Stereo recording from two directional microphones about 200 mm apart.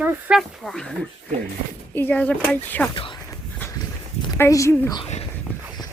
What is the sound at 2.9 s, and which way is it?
Speech, 25° left (ahead or behind).